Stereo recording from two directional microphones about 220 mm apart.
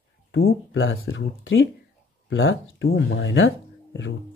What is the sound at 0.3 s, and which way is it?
Speech, 60° left (ahead or behind).